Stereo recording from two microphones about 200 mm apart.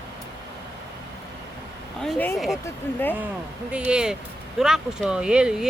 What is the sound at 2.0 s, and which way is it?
Speech, 5° left (ahead or behind).